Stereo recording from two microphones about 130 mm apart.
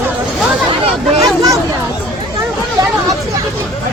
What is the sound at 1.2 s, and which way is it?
Speech, 25° right (ahead or behind).